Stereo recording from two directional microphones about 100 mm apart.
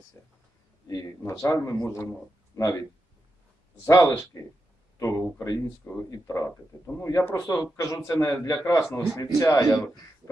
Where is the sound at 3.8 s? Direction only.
35° left (ahead or behind).